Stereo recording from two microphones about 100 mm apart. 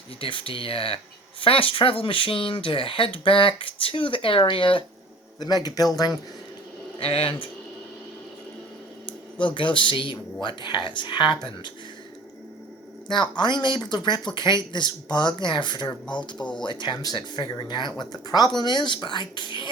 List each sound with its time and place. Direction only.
0.2 s speech: 60° left (ahead or behind)
5.4 s speech: 40° left (ahead or behind)
7.0 s speech: 65° left (ahead or behind)
9.6 s speech: 55° left (ahead or behind)
13.1 s speech: 50° left (ahead or behind)